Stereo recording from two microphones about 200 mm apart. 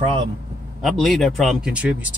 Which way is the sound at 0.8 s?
Centre (ahead or behind).